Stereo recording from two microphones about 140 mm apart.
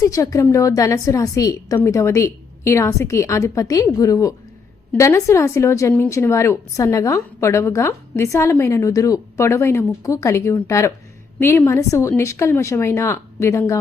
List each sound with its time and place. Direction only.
0.0 s a woman's voice: 25° left (ahead or behind)